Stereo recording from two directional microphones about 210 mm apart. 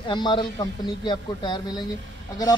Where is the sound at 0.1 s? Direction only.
20° left (ahead or behind).